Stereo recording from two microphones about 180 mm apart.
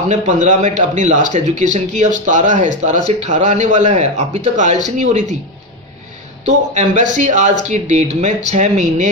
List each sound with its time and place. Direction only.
0.1 s a man's voice: 40° right (ahead or behind)
6.4 s speech: 40° right (ahead or behind)